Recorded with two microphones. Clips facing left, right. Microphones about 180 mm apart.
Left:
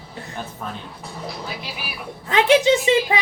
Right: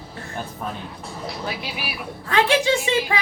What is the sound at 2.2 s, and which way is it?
Speech, 20° left (ahead or behind).